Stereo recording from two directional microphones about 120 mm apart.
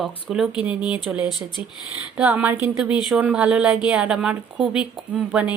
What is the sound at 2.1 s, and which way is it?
A woman's voice, 10° right (ahead or behind).